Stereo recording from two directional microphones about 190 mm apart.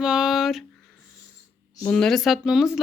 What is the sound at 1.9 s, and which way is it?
Speech, 5° left (ahead or behind).